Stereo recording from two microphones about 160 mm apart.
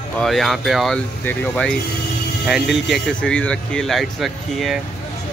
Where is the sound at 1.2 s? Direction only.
10° left (ahead or behind).